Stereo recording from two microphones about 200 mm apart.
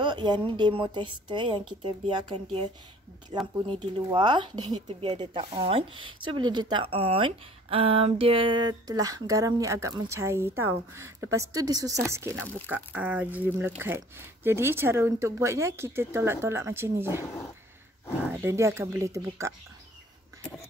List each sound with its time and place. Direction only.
0.0 s speech: 20° right (ahead or behind)
18.4 s speech: 15° right (ahead or behind)